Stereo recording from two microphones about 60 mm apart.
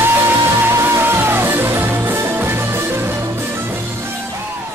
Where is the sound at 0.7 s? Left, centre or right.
Right.